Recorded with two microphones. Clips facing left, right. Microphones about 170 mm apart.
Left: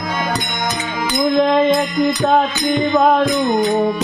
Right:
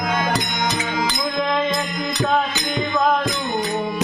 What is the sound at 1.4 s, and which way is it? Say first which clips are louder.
Music: left 8 dB; 45° left (ahead or behind).